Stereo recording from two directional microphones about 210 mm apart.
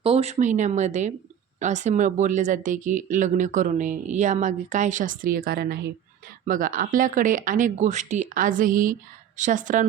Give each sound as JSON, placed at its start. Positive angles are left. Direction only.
{"t": 0.0, "sound": "speech", "side_deg": -30}